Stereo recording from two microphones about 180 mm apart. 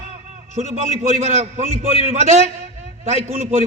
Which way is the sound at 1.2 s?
35° right (ahead or behind).